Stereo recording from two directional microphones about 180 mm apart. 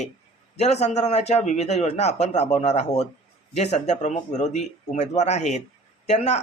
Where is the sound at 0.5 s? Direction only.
35° left (ahead or behind).